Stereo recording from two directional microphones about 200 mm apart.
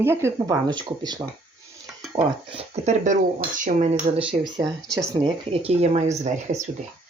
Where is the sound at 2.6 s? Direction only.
35° right (ahead or behind).